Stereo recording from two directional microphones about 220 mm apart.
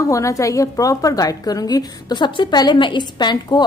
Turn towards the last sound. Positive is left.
turn(degrees=20)  # may be behind; listen again after turning